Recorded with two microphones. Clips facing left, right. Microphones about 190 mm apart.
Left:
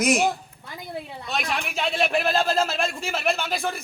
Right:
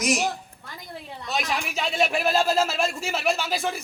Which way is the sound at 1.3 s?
Centre (ahead or behind).